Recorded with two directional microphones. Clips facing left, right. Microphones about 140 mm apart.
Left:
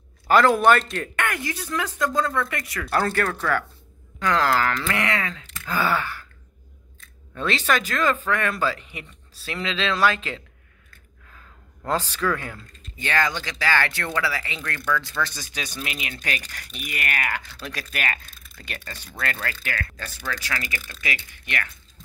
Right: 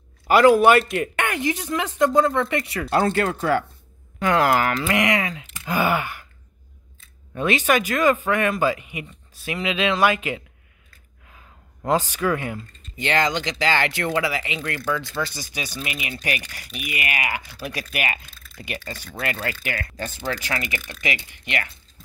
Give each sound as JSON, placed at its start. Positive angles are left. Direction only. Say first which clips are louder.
{"t": 0.3, "sound": "a man's voice", "louder": "right 3 dB", "side_deg": -10}
{"t": 7.3, "sound": "speech", "louder": "right 3 dB", "side_deg": -15}
{"t": 11.2, "sound": "gasp", "louder": "even", "side_deg": -15}
{"t": 13.0, "sound": "speech", "louder": "right 3 dB", "side_deg": -20}
{"t": 19.4, "sound": "a man's voice", "louder": "right 2 dB", "side_deg": -15}